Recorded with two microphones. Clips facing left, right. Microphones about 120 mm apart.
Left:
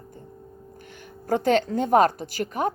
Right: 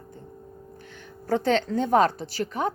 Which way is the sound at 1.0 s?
45° left (ahead or behind).